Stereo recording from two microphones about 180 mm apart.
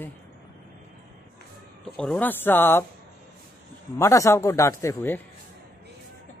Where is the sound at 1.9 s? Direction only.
5° left (ahead or behind).